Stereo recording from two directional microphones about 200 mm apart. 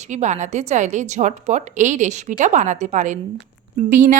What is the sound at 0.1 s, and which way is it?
Speech, 35° right (ahead or behind).